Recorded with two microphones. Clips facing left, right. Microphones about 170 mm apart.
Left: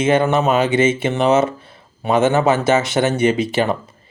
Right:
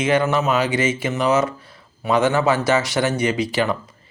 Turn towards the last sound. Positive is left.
turn(degrees=25)  # may be behind; listen again after turning